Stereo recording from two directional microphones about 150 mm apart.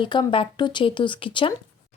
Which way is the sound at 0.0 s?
30° left (ahead or behind).